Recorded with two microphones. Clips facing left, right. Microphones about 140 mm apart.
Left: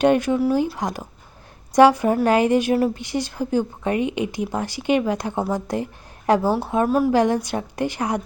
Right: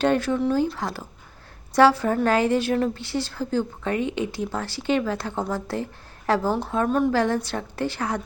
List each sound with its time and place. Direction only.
0.0 s a woman's voice: 15° left (ahead or behind)